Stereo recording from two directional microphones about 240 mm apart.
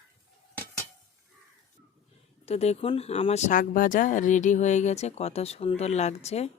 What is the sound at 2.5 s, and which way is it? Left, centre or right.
Speech, left.